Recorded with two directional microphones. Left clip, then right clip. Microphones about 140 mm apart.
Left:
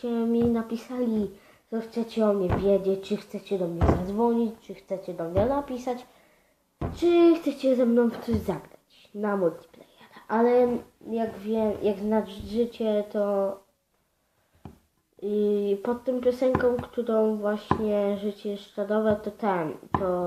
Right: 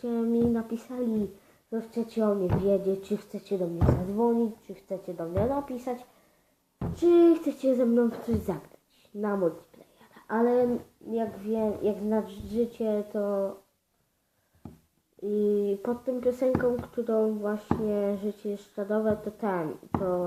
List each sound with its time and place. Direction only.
0.0 s speech: 5° left (ahead or behind)
7.0 s speech: 10° left (ahead or behind)
9.2 s speech: 10° left (ahead or behind)
10.0 s a sound: 15° left (ahead or behind)
11.1 s speech: 5° left (ahead or behind)
15.2 s speech: 10° left (ahead or behind)